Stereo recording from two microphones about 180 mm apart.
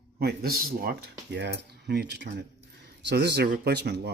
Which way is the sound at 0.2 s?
60° right (ahead or behind).